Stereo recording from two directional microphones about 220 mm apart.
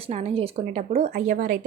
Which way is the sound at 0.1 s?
25° right (ahead or behind).